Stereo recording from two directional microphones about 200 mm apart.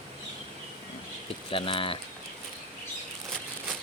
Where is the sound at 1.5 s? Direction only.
25° left (ahead or behind).